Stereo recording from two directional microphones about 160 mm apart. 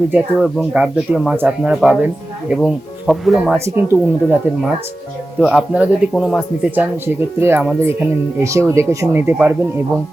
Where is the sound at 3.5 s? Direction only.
15° right (ahead or behind).